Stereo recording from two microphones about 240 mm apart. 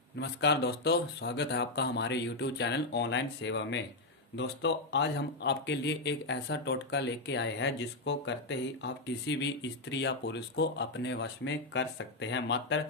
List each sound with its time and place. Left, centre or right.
0.2 s speech: left